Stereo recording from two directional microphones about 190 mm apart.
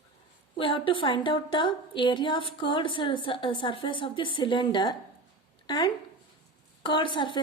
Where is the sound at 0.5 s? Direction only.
25° left (ahead or behind).